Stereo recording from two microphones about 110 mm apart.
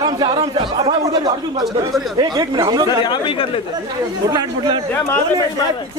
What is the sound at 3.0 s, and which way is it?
Speech, 50° left (ahead or behind).